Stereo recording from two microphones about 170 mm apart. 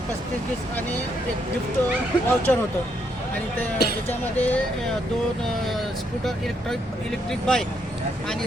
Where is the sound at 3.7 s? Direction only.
65° left (ahead or behind).